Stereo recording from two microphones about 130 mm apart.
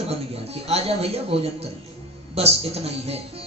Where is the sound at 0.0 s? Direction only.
50° right (ahead or behind).